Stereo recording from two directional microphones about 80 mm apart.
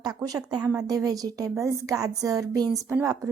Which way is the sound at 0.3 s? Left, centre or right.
Right.